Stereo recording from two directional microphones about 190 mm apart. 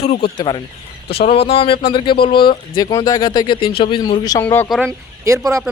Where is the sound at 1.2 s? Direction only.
30° left (ahead or behind); by 4.6 s 10° left (ahead or behind).